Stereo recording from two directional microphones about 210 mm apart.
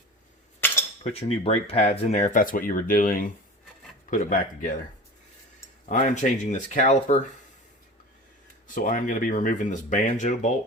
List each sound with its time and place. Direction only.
1.0 s speech: 30° left (ahead or behind)
5.9 s speech: 35° left (ahead or behind)
8.6 s speech: 40° left (ahead or behind)